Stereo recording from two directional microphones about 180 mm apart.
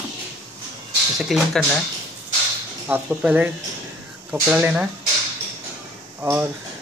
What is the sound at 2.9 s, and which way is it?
Speech, 10° right (ahead or behind).